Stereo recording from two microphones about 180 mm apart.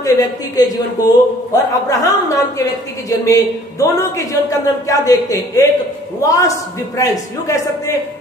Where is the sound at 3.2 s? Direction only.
20° left (ahead or behind).